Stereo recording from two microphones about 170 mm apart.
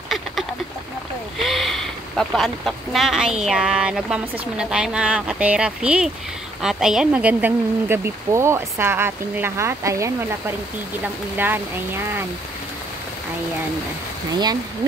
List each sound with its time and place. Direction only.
1.4 s a sound: centre (ahead or behind)
3.4 s speech: 5° right (ahead or behind)
11.3 s speech: 10° right (ahead or behind)
14.3 s speech: 20° right (ahead or behind)